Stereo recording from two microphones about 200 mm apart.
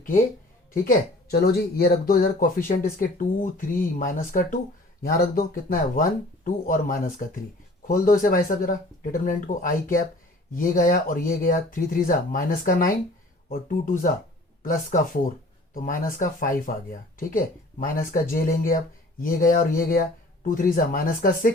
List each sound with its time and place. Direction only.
0.7 s speech: 50° left (ahead or behind)